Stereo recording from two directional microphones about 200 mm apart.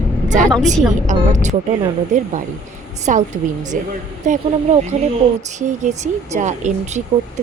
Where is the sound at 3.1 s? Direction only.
40° right (ahead or behind).